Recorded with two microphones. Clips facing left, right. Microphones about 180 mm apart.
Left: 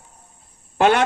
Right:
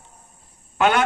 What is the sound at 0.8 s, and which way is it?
Speech, 35° left (ahead or behind).